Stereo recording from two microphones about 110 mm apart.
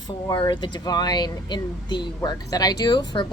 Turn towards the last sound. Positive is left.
turn(degrees=45)  # may be behind; listen again after turning